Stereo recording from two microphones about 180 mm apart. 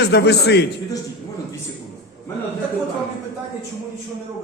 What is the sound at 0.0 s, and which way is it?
Speech, 70° left (ahead or behind).